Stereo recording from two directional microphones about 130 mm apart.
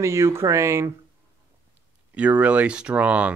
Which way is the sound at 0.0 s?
20° right (ahead or behind).